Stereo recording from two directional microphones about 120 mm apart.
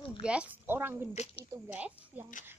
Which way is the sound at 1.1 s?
65° left (ahead or behind).